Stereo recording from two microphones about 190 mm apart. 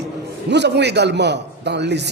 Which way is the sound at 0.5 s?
65° right (ahead or behind).